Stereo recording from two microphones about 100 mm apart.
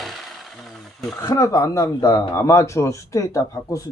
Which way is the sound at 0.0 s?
Centre (ahead or behind).